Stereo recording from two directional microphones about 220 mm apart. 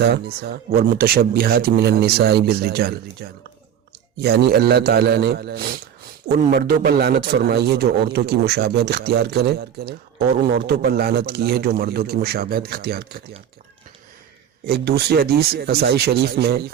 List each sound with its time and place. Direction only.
0.0 s a man's voice: 45° right (ahead or behind)
14.7 s a man's voice: 45° right (ahead or behind)